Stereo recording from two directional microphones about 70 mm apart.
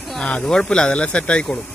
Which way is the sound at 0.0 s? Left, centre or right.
Centre.